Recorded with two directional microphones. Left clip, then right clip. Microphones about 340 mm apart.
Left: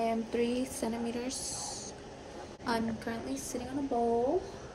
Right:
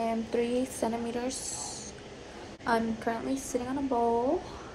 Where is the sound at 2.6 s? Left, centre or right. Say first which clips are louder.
Right 5 dB; centre.